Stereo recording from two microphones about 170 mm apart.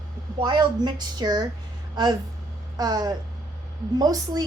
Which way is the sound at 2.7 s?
20° right (ahead or behind).